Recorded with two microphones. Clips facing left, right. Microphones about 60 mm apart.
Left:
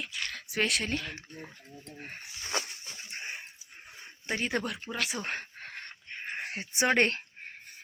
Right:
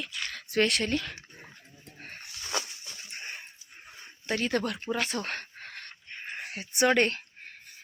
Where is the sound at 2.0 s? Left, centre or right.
Centre.